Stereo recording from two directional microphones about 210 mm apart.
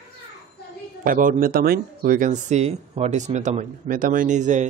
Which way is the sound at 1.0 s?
40° right (ahead or behind).